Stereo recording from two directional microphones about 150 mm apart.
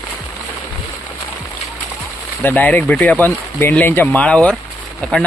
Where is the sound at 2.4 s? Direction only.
10° left (ahead or behind).